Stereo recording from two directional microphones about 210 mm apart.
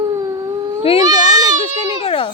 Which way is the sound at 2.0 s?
25° left (ahead or behind).